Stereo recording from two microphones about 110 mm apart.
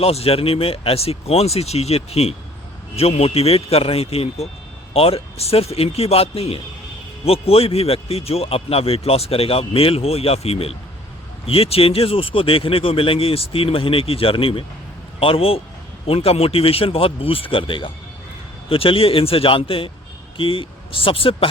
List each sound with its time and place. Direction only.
0.0 s a man's voice: 65° left (ahead or behind)